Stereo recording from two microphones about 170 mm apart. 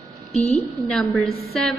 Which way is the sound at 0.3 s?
40° left (ahead or behind).